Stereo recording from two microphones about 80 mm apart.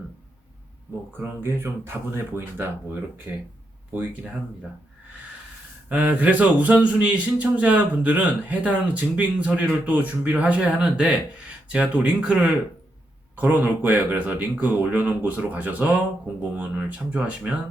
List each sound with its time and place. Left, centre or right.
1.1 s speech: right
5.9 s speech: centre